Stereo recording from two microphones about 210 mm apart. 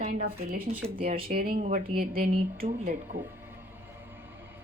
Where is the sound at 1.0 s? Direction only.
25° right (ahead or behind).